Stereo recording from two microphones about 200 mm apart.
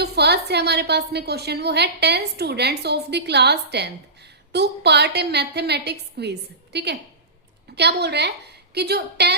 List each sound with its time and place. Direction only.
0.0 s a woman's voice: 55° right (ahead or behind)
7.8 s a woman's voice: 55° right (ahead or behind)